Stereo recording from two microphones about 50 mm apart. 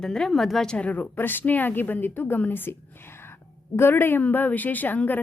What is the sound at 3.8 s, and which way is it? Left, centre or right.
A woman's voice, left.